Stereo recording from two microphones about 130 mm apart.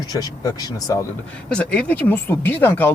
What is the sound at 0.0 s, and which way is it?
Speech, 30° left (ahead or behind).